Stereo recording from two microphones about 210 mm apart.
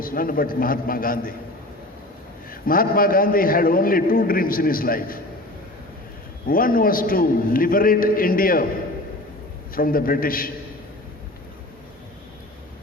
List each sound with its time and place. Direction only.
0.0 s a man's voice: 45° left (ahead or behind)
2.5 s a man's voice: 45° left (ahead or behind)
6.5 s a man's voice: 45° left (ahead or behind)
9.7 s a man's voice: 45° left (ahead or behind)